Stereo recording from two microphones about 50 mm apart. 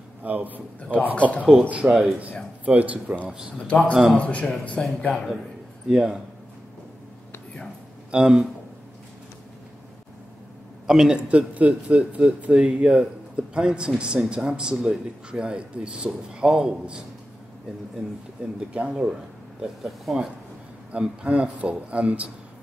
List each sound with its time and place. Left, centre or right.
0.2 s a man's voice: right
0.9 s speech: left
2.0 s a man's voice: right
3.5 s speech: left
3.9 s a man's voice: centre
4.2 s speech: left
5.9 s a man's voice: centre
8.1 s a man's voice: centre
10.9 s a man's voice: centre
11.2 s a man's voice: right
18.7 s a man's voice: centre
19.6 s speech: centre
20.9 s a man's voice: right